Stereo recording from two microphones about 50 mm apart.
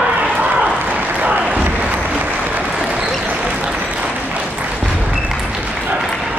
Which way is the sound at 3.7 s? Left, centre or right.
Right.